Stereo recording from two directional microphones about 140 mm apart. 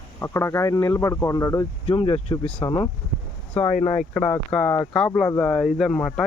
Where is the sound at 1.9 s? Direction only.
45° left (ahead or behind).